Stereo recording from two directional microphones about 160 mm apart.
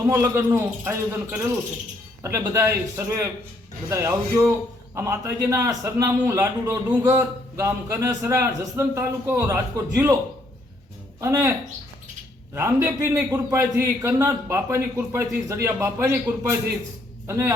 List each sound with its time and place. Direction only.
0.0 s a man's voice: 20° right (ahead or behind)
11.2 s a man's voice: 20° right (ahead or behind)
12.5 s a man's voice: 15° right (ahead or behind)